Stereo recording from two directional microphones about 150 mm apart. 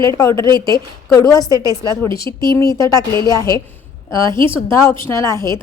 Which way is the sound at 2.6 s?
20° left (ahead or behind).